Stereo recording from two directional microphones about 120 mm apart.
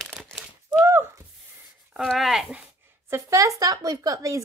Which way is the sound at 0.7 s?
20° right (ahead or behind).